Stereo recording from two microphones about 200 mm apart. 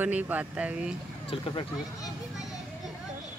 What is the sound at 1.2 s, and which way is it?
Speech, 25° left (ahead or behind).